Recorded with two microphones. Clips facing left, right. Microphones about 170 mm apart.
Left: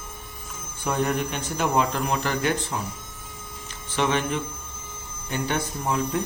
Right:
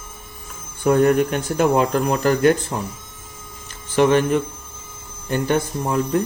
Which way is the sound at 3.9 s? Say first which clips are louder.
Right 9 dB; 50° right (ahead or behind).